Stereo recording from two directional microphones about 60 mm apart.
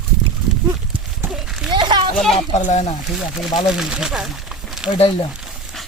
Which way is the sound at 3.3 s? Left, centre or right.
Centre.